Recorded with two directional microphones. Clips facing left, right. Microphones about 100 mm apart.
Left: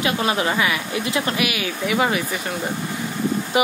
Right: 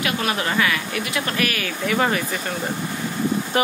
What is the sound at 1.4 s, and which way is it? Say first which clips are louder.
A man's voice: left 1 dB; 10° left (ahead or behind).